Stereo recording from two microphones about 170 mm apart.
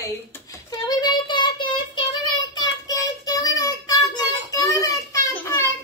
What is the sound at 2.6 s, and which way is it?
Child singing, 20° left (ahead or behind).